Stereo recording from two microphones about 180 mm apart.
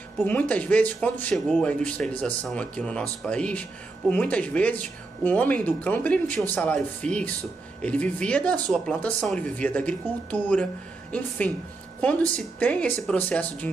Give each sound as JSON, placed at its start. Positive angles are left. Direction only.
{"t": 0.2, "sound": "speech", "side_deg": 10}